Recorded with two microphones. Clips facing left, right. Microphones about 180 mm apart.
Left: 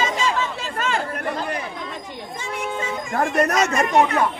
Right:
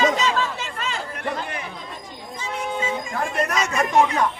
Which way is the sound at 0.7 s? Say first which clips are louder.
Left 5 dB; 50° left (ahead or behind).